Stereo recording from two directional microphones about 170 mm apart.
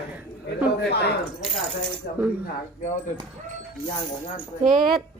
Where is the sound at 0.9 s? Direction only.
75° left (ahead or behind).